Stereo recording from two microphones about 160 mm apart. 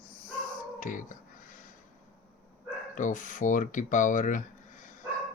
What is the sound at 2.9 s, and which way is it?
Speech, 50° left (ahead or behind).